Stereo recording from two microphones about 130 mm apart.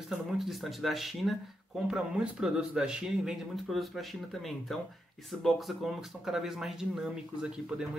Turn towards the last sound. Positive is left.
turn(degrees=-5)  # may be behind; listen again after turning